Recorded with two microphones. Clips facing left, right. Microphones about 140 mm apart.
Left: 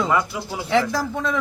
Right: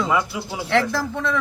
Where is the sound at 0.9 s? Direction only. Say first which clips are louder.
Even; 15° left (ahead or behind).